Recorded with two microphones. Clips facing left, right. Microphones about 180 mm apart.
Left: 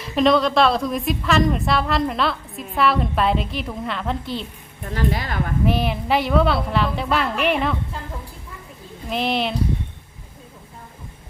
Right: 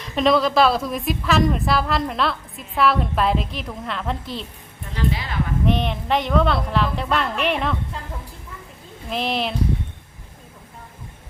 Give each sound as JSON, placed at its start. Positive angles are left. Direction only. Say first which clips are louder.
{"t": 0.0, "sound": "a woman's voice", "louder": "left 1 dB", "side_deg": 0}
{"t": 4.9, "sound": "a woman's voice", "louder": "left 2 dB", "side_deg": 50}
{"t": 5.6, "sound": "a woman's voice", "louder": "left 1 dB", "side_deg": 5}
{"t": 9.0, "sound": "a woman's voice", "louder": "left 2 dB", "side_deg": 0}